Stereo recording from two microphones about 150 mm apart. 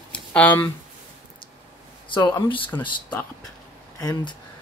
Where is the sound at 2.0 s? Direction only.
35° left (ahead or behind).